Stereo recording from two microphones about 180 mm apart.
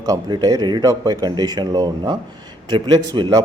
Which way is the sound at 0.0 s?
20° right (ahead or behind).